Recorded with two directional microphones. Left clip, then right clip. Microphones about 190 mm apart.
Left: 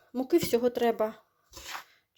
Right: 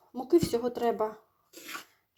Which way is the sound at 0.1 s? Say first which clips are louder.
Even; 35° left (ahead or behind).